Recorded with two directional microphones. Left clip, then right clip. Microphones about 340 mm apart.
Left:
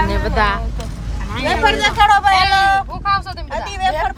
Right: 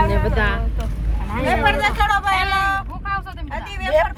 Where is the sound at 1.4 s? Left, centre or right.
Left.